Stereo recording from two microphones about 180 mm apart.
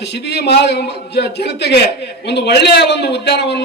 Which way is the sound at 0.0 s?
70° left (ahead or behind).